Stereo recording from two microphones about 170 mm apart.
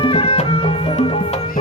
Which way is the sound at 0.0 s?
30° left (ahead or behind).